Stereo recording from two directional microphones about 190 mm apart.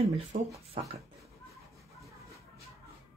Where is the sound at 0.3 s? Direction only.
40° right (ahead or behind).